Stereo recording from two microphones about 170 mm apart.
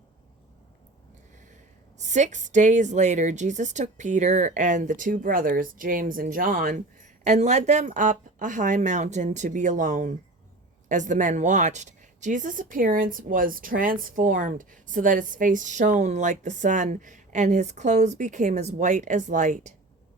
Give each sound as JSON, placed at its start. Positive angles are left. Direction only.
{"t": 2.0, "sound": "a woman's voice", "side_deg": -45}
{"t": 7.3, "sound": "a woman's voice", "side_deg": -40}